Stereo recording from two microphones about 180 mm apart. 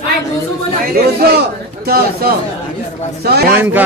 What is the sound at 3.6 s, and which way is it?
Speech, 10° right (ahead or behind).